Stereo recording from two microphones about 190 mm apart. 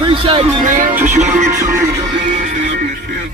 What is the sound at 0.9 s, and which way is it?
Music, 10° right (ahead or behind).